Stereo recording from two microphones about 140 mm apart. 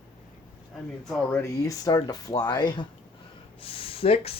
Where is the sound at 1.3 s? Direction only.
20° left (ahead or behind); by 4.3 s 45° left (ahead or behind).